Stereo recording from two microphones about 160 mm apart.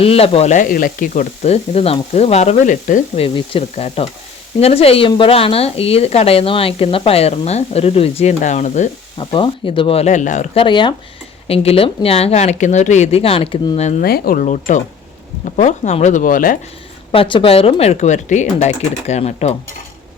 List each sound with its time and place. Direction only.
0.0 s sizzle: 35° left (ahead or behind); by 3.0 s 55° left (ahead or behind)
3.2 s speech: 35° left (ahead or behind)
9.1 s speech: 30° left (ahead or behind); by 10.4 s 50° left (ahead or behind)
10.5 s speech: 30° left (ahead or behind)
14.0 s speech: 65° left (ahead or behind); by 14.8 s 50° left (ahead or behind)
15.4 s sizzle: 50° left (ahead or behind)
17.1 s speech: 30° left (ahead or behind)